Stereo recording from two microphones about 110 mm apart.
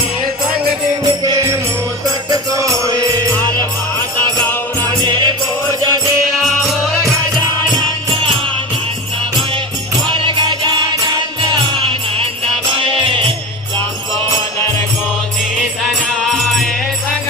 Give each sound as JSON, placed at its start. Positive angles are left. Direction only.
{"t": 1.2, "sound": "music", "side_deg": -35}
{"t": 5.0, "sound": "music", "side_deg": -40}
{"t": 6.3, "sound": "music", "side_deg": 0}
{"t": 10.1, "sound": "music", "side_deg": -50}
{"t": 15.8, "sound": "music", "side_deg": 0}